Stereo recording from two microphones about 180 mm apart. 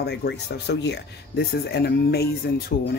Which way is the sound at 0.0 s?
70° left (ahead or behind).